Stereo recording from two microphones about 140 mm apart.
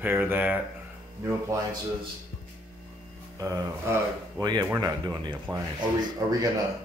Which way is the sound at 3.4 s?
20° right (ahead or behind).